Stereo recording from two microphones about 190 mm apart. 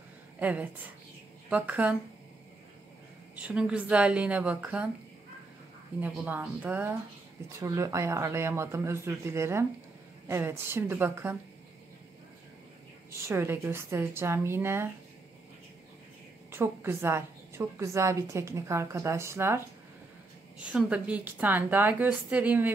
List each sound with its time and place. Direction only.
0.4 s a woman's voice: 10° right (ahead or behind)
3.3 s a woman's voice: 5° right (ahead or behind)
5.9 s a woman's voice: 10° right (ahead or behind)
13.3 s a woman's voice: 10° right (ahead or behind)
16.5 s a woman's voice: 10° right (ahead or behind)